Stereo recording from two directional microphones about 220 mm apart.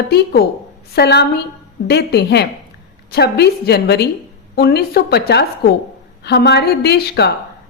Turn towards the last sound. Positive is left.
turn(degrees=50)  # may be behind; listen again after turning